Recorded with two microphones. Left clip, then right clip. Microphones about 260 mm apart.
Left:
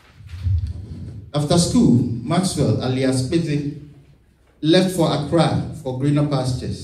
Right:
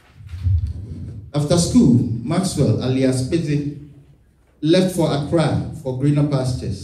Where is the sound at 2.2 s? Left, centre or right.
Left.